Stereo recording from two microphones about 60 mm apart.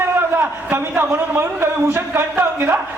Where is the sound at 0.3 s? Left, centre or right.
Right.